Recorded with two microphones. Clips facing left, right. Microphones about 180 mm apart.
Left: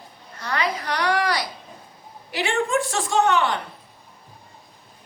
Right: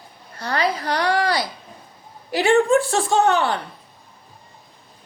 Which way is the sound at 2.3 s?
40° right (ahead or behind).